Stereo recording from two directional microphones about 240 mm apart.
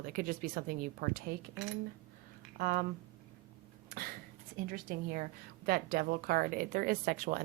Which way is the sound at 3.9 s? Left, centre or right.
Right.